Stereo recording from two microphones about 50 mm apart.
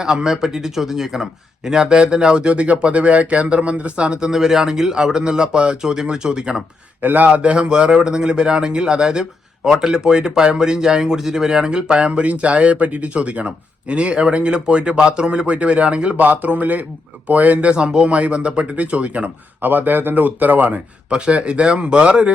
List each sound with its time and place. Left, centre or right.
0.0 s speech: centre
4.3 s speech: centre
7.0 s speech: right
7.3 s speech: right
16.2 s speech: right
19.6 s speech: right